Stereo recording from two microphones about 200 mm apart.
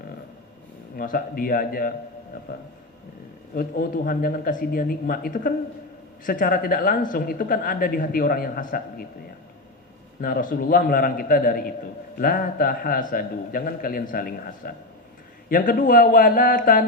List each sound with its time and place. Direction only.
0.9 s speech: 45° left (ahead or behind)
3.5 s speech: 45° left (ahead or behind)
10.2 s speech: 45° left (ahead or behind)